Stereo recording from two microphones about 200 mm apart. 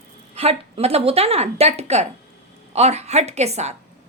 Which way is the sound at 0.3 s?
30° right (ahead or behind).